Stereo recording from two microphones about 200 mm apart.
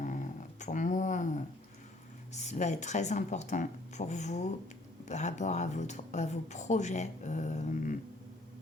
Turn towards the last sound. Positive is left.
turn(degrees=40)  # may be behind; listen again after turning